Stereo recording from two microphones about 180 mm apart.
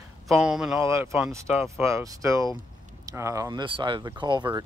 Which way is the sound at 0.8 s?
15° right (ahead or behind).